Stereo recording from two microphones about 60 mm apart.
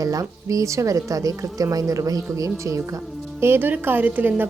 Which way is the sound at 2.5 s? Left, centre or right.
Right.